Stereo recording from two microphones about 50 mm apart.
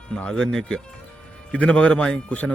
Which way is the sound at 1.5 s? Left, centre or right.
Left.